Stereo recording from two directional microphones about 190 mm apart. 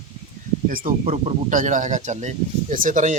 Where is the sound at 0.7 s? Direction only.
45° right (ahead or behind).